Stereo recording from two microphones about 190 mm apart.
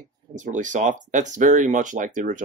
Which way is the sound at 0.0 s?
40° right (ahead or behind).